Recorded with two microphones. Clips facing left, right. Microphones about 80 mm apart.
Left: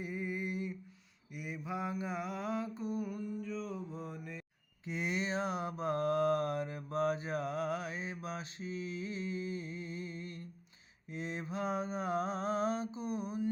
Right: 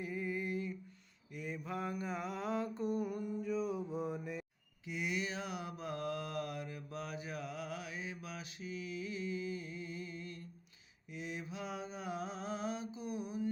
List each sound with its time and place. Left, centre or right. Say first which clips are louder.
0.0 s a sound: left 1 dB; left
1.3 s mantra: left 1 dB; centre
3.0 s mantra: right 1 dB; centre
4.9 s mantra: left 3 dB; left